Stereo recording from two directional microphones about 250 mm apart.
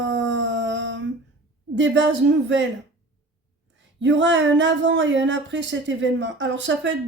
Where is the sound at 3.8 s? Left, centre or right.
Right.